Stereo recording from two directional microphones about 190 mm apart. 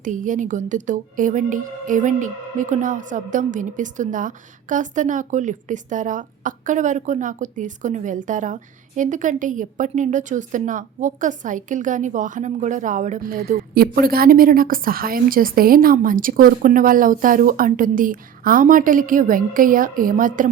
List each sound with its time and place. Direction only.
0.0 s speech: 40° right (ahead or behind)